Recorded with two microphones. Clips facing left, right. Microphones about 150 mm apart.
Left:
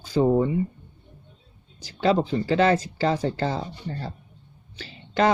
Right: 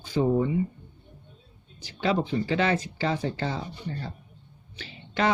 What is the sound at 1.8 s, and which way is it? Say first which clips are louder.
Speech: left 4 dB; 40° left (ahead or behind).